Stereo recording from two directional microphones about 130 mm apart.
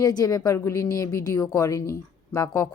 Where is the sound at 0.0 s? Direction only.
30° left (ahead or behind).